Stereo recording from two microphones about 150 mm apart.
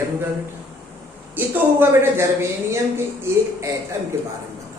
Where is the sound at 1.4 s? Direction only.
15° right (ahead or behind).